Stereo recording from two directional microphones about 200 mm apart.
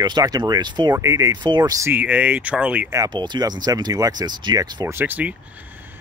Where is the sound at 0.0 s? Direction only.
20° right (ahead or behind).